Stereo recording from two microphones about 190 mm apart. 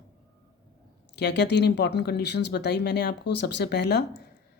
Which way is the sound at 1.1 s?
65° left (ahead or behind).